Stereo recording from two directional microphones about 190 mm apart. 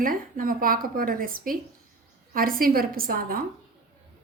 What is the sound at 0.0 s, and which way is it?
A woman's voice, 45° right (ahead or behind).